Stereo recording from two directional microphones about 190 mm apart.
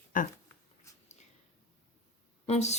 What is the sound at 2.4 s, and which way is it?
Speech, 35° left (ahead or behind).